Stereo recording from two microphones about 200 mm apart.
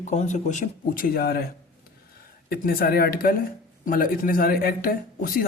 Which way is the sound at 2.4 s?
50° left (ahead or behind).